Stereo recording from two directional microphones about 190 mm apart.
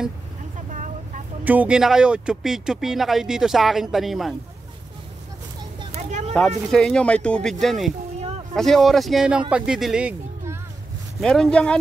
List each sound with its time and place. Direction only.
1.4 s speech: 10° right (ahead or behind)
5.9 s a sound: 35° right (ahead or behind)
6.7 s speech: 5° left (ahead or behind)
11.1 s speech: 5° left (ahead or behind)